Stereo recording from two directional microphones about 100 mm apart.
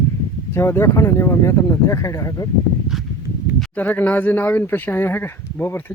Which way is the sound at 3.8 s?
15° left (ahead or behind).